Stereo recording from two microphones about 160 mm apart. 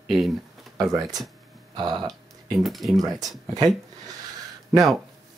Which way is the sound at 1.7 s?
25° right (ahead or behind).